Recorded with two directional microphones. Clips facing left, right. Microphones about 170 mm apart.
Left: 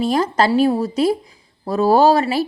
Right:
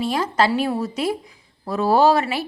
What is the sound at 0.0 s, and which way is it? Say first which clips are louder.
A woman's voice: left 3 dB; 40° left (ahead or behind).